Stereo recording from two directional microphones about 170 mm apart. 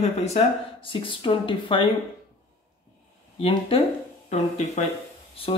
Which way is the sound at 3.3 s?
30° left (ahead or behind).